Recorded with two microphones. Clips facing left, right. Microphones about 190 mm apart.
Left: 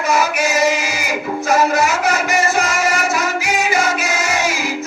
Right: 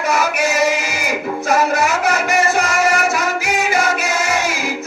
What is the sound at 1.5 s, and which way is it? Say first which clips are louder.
Music: left 1 dB; 60° right (ahead or behind).